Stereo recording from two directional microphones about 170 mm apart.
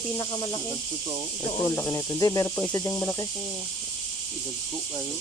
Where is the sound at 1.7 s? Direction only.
15° left (ahead or behind).